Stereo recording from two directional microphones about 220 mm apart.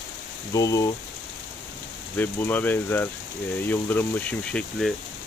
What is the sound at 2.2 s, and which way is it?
Speech, 10° left (ahead or behind).